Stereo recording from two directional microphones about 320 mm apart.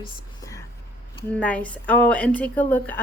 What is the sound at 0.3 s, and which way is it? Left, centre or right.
Whispering, centre.